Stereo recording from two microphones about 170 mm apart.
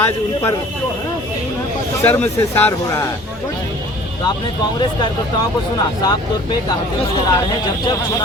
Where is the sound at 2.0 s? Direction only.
10° left (ahead or behind).